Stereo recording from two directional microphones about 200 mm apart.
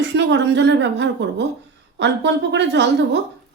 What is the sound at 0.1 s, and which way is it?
A woman's voice, 60° right (ahead or behind).